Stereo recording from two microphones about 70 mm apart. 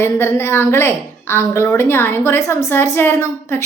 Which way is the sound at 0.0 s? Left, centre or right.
Left.